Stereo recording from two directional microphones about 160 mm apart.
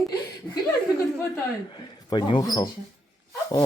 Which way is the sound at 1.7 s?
30° left (ahead or behind).